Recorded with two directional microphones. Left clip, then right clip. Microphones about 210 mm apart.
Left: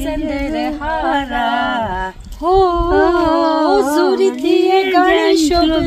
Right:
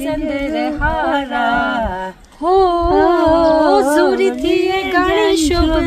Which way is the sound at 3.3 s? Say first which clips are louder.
Right 2 dB; 15° right (ahead or behind).